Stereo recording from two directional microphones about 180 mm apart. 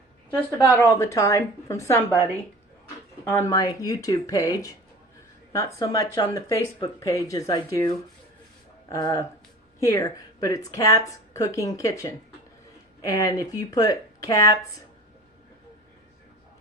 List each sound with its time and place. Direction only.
0.8 s a woman's voice: 15° left (ahead or behind)
3.2 s a woman's voice: 15° left (ahead or behind)